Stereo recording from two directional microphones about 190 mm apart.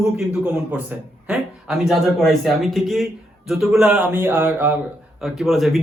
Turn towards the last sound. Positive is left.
turn(degrees=0)  # may be behind; listen again after turning